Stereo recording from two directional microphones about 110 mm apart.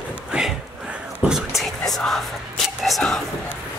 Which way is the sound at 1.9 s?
5° left (ahead or behind).